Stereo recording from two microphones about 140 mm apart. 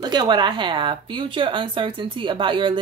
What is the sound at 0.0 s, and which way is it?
Speech, 30° right (ahead or behind).